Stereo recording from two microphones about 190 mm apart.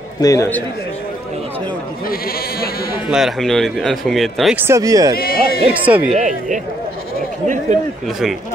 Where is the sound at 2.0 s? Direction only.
50° left (ahead or behind).